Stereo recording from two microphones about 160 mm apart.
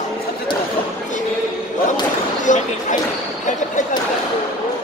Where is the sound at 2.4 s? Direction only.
50° left (ahead or behind).